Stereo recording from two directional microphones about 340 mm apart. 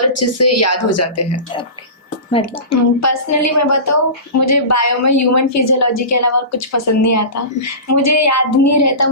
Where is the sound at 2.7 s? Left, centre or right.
Left.